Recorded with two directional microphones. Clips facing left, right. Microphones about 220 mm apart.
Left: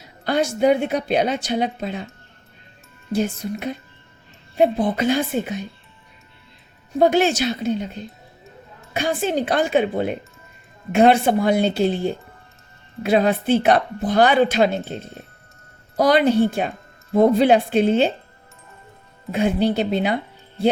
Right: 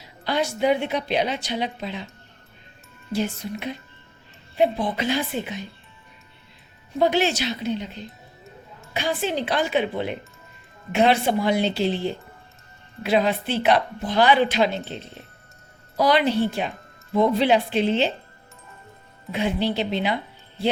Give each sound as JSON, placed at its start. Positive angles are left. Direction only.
{"t": 0.3, "sound": "a woman's voice", "side_deg": 45}
{"t": 3.1, "sound": "a woman's voice", "side_deg": 50}
{"t": 4.5, "sound": "a woman's voice", "side_deg": 50}
{"t": 7.0, "sound": "a woman's voice", "side_deg": 50}
{"t": 19.3, "sound": "a woman's voice", "side_deg": 50}